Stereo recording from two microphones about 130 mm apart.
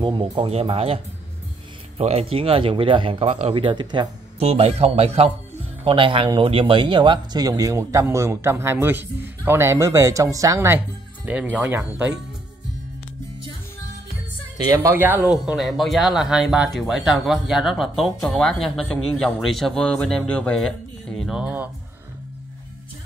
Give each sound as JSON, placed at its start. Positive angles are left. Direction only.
{"t": 0.0, "sound": "speech", "side_deg": -40}
{"t": 4.4, "sound": "speech", "side_deg": -50}
{"t": 11.2, "sound": "speech", "side_deg": -10}
{"t": 14.7, "sound": "speech", "side_deg": -20}
{"t": 15.3, "sound": "speech", "side_deg": 0}